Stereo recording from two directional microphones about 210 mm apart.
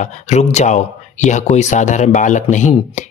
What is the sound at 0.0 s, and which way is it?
Speech, 35° left (ahead or behind).